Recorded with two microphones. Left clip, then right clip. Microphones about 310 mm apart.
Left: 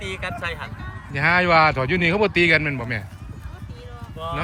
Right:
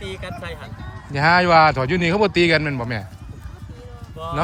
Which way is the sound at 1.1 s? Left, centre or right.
Centre.